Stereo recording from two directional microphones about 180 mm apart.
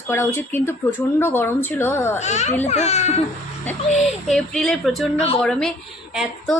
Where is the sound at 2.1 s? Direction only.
40° left (ahead or behind).